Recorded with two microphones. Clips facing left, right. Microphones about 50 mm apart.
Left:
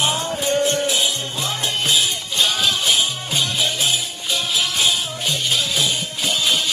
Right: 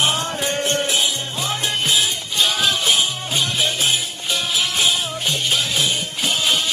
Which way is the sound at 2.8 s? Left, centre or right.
Right.